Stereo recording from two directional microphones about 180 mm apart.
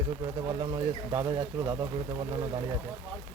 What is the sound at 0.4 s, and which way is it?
Speech, 25° right (ahead or behind).